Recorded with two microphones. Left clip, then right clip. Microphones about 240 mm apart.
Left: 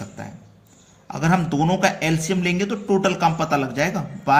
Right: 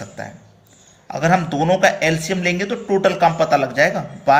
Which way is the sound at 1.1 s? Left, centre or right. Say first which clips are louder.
Right 5 dB; left.